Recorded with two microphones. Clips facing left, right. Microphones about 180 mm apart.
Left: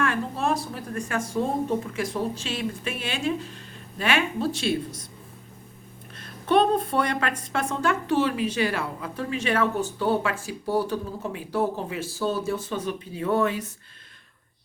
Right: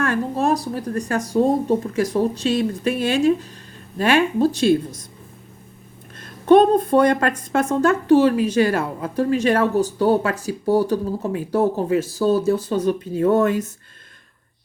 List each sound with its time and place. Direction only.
0.0 s a woman's voice: 40° right (ahead or behind)
6.1 s a woman's voice: 45° right (ahead or behind)